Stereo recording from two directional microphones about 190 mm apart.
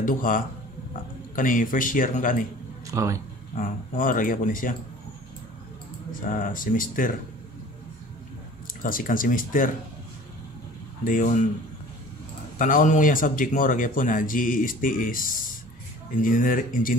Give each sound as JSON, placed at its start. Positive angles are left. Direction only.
{"t": 0.0, "sound": "speech", "side_deg": 45}
{"t": 2.9, "sound": "speech", "side_deg": -15}
{"t": 3.5, "sound": "speech", "side_deg": 45}
{"t": 6.2, "sound": "speech", "side_deg": 45}
{"t": 8.8, "sound": "speech", "side_deg": 45}
{"t": 11.1, "sound": "speech", "side_deg": 40}
{"t": 12.5, "sound": "speech", "side_deg": 45}